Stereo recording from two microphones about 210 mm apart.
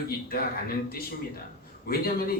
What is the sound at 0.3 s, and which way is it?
Speech, 45° left (ahead or behind).